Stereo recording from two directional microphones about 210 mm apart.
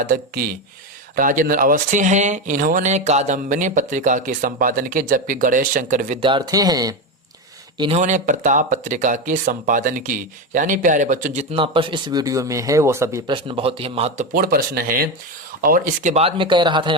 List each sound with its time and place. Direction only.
0.0 s speech: 40° right (ahead or behind); by 6.9 s 20° right (ahead or behind)
7.8 s speech: 30° right (ahead or behind)
11.5 s speech: 25° right (ahead or behind)
14.3 s speech: 45° right (ahead or behind); by 16.9 s 20° right (ahead or behind)